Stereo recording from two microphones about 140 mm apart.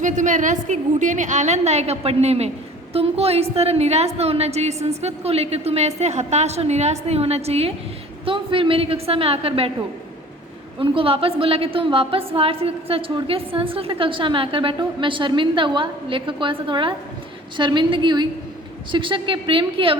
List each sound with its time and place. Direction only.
0.0 s a woman's voice: 65° right (ahead or behind); by 9.7 s 45° right (ahead or behind)
10.8 s a woman's voice: 40° right (ahead or behind)